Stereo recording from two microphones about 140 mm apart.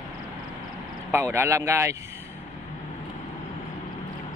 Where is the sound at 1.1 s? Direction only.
20° right (ahead or behind).